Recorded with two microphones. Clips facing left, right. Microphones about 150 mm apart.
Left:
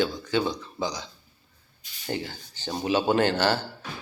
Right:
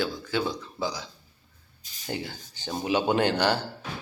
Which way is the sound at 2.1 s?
10° right (ahead or behind).